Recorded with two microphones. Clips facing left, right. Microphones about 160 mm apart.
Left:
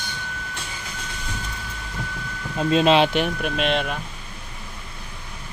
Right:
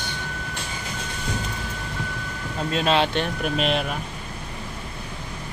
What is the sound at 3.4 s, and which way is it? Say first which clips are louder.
Speech: even; centre (ahead or behind).